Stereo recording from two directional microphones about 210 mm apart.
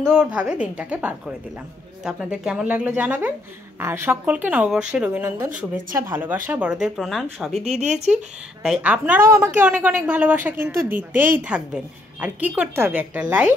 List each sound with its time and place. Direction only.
0.0 s a woman's voice: 5° right (ahead or behind)
7.6 s speech: 35° right (ahead or behind)
8.6 s a woman's voice: 5° right (ahead or behind)